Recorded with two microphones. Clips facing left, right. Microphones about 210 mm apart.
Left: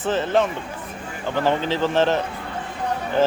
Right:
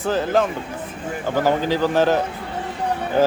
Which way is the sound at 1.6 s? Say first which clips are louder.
Right 2 dB; 5° right (ahead or behind).